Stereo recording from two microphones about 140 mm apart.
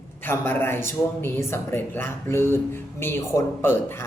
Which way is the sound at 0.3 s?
15° left (ahead or behind).